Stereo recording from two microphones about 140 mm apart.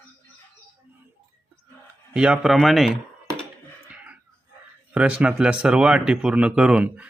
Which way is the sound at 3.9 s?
10° right (ahead or behind).